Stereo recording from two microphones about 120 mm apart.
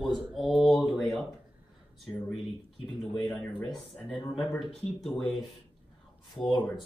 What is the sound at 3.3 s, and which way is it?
Speech, 10° left (ahead or behind).